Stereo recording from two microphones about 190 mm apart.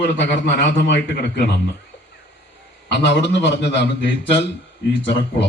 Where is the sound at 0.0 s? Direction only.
65° left (ahead or behind).